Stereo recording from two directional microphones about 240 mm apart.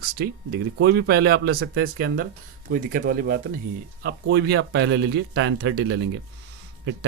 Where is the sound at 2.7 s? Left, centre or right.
Right.